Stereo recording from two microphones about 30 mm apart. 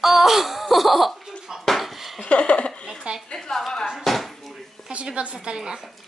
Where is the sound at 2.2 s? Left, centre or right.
Left.